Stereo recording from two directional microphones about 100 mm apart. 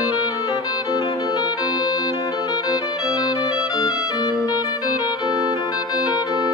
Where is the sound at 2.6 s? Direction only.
35° left (ahead or behind).